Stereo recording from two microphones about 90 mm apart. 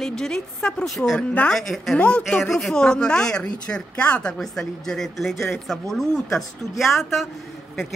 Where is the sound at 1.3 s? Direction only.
15° left (ahead or behind).